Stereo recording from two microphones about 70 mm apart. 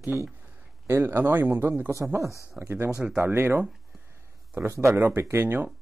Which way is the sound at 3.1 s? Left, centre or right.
Right.